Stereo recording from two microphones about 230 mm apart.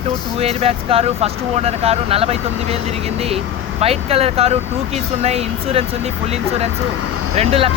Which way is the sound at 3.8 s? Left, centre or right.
Right.